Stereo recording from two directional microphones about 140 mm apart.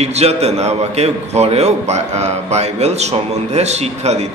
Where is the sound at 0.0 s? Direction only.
50° right (ahead or behind).